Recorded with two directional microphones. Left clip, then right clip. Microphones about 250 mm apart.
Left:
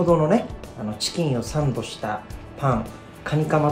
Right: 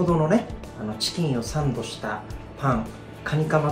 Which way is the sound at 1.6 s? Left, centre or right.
Left.